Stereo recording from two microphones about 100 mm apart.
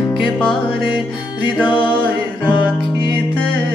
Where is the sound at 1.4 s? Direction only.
50° left (ahead or behind).